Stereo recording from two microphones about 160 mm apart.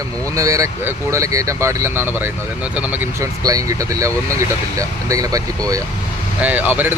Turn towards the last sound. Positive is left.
turn(degrees=-10)  # may be behind; listen again after turning